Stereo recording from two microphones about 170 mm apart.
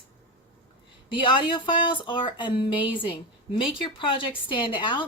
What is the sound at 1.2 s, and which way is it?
A woman's voice, 30° left (ahead or behind).